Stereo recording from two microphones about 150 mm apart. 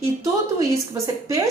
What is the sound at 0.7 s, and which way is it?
Speech, 20° right (ahead or behind).